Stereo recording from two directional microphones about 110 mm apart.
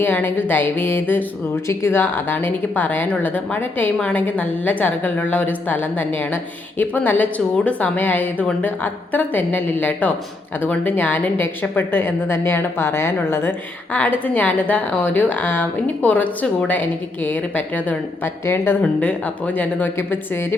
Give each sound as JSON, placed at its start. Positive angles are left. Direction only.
{"t": 0.0, "sound": "a woman's voice", "side_deg": 20}